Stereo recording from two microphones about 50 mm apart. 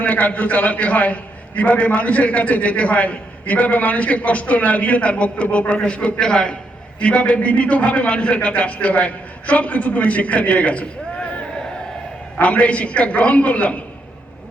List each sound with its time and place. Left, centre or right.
0.0 s a man's voice: left